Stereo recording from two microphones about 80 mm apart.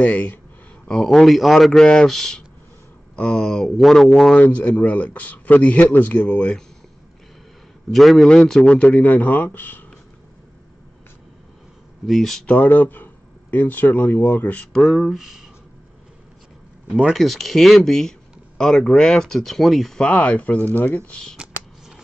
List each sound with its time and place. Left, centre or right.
0.0 s a man's voice: centre
0.8 s speech: centre
4.4 s a man's voice: centre
7.9 s a man's voice: centre; by 9.8 s left
12.1 s speech: centre
12.4 s speech: centre
14.8 s speech: centre
16.9 s speech: centre
20.0 s a man's voice: centre
21.4 s a sound: centre